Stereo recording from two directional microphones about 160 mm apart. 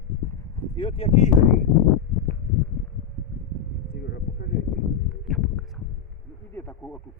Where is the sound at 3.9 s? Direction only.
85° left.